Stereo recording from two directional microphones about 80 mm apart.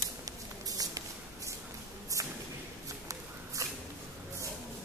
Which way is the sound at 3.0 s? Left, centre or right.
Right.